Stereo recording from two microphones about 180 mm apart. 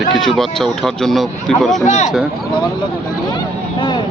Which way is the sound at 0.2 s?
Centre (ahead or behind).